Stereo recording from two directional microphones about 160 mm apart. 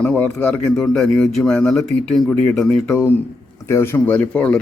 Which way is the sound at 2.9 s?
15° left (ahead or behind).